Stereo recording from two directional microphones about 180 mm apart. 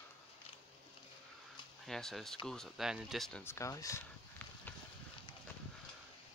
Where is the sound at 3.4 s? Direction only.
15° left (ahead or behind).